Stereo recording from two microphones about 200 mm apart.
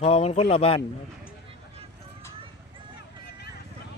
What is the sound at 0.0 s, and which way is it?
Speech, 30° left (ahead or behind).